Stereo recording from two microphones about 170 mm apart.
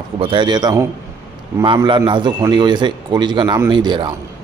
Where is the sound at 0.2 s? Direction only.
30° right (ahead or behind).